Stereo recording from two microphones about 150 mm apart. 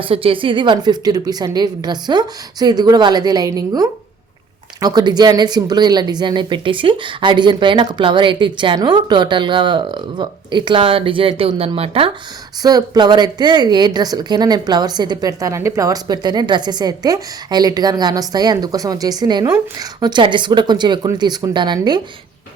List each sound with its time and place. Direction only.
0.0 s a woman's voice: 35° right (ahead or behind)
12.6 s a woman's voice: 25° right (ahead or behind)